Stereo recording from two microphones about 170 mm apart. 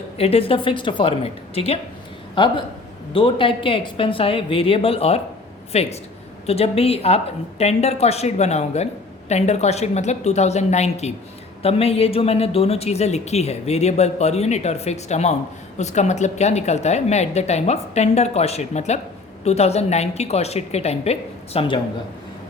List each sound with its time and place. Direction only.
0.2 s speech: 35° left (ahead or behind)